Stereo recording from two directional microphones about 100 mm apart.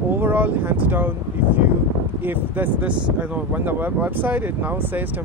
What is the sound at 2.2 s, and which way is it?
Speech, 20° right (ahead or behind).